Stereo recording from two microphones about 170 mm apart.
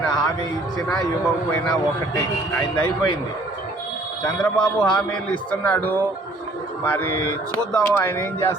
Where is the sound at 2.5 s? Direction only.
15° left (ahead or behind).